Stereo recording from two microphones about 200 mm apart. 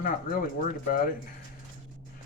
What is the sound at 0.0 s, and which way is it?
A man's voice, 45° left (ahead or behind).